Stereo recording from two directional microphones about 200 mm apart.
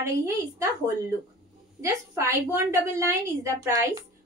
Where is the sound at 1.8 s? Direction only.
15° right (ahead or behind).